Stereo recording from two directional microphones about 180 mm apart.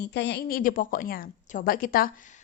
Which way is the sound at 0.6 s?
50° left (ahead or behind).